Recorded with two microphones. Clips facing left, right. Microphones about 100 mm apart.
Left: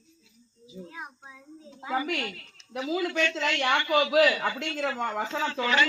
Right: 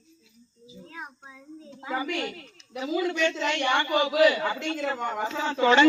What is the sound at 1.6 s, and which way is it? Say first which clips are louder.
Speech: right 2 dB; 15° left (ahead or behind).